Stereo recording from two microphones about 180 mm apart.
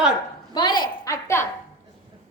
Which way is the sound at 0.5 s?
25° left (ahead or behind).